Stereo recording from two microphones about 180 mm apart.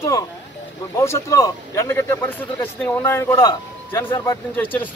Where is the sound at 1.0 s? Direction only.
15° left (ahead or behind).